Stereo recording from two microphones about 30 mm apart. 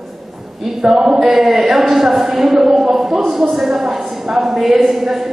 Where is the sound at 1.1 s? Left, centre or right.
Centre.